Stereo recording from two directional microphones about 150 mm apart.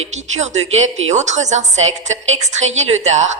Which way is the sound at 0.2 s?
50° right (ahead or behind).